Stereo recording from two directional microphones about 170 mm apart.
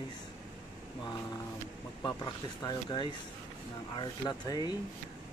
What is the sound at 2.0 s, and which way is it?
Speech, 25° left (ahead or behind).